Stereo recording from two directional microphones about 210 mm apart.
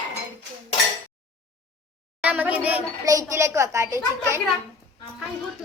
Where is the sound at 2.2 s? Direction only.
5° right (ahead or behind).